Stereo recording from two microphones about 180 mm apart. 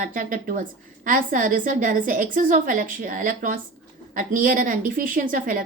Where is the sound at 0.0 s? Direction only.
50° right (ahead or behind).